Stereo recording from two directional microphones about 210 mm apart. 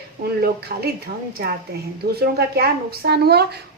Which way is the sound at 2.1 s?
50° right (ahead or behind).